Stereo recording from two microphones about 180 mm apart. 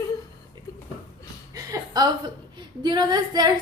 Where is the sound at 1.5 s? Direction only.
20° right (ahead or behind).